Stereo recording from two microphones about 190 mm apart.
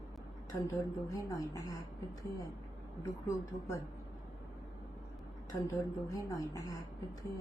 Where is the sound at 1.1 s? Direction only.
20° left (ahead or behind).